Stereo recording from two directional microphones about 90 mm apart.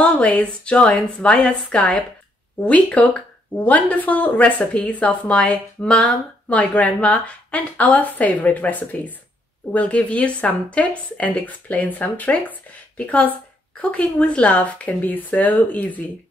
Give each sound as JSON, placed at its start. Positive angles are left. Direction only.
{"t": 0.0, "sound": "speech", "side_deg": 15}